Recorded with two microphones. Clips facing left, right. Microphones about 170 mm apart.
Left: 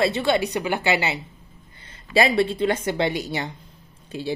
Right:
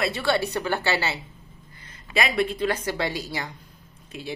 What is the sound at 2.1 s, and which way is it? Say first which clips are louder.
Speech: left 5 dB; 30° left (ahead or behind).